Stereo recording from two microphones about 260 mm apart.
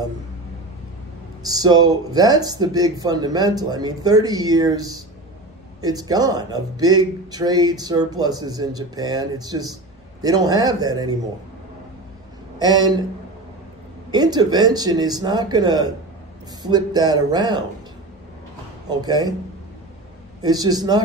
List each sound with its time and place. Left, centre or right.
1.4 s speech: centre
12.5 s speech: centre
14.1 s speech: centre
18.9 s speech: centre
20.4 s speech: centre